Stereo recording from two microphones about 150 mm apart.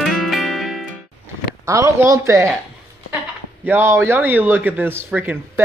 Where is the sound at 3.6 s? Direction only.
15° right (ahead or behind).